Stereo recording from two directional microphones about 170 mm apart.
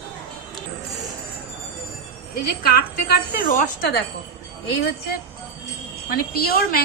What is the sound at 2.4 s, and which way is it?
A woman's voice, 65° left (ahead or behind).